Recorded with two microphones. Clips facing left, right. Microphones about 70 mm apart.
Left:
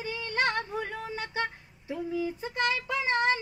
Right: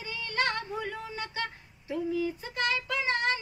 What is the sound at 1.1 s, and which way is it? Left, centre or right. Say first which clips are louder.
Child singing: left 3 dB; centre.